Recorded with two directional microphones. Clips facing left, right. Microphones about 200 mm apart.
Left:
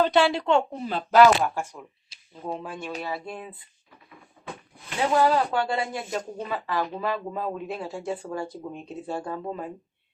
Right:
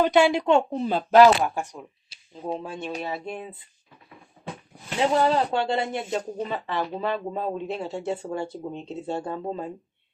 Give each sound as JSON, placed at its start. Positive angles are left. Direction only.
{"t": 0.0, "sound": "a woman's voice", "side_deg": -15}
{"t": 4.9, "sound": "speech", "side_deg": -25}